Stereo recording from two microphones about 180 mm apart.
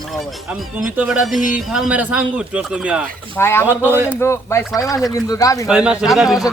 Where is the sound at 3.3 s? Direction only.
15° left (ahead or behind).